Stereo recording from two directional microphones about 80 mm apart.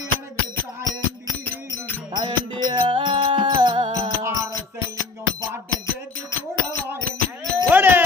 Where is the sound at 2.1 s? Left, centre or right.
Right.